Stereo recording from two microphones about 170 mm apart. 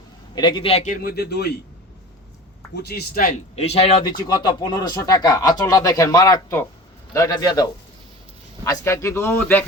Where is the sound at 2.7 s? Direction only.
70° left (ahead or behind).